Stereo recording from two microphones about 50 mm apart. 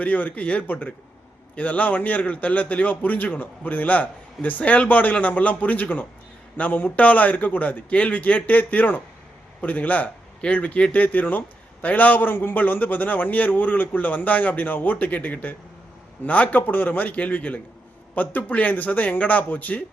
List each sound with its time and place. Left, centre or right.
0.0 s speech: left